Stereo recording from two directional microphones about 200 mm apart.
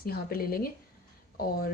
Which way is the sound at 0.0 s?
50° left (ahead or behind).